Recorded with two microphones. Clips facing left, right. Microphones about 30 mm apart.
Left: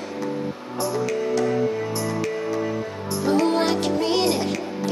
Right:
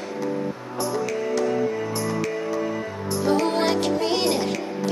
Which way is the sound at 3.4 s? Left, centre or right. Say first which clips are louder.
Left 1 dB; centre.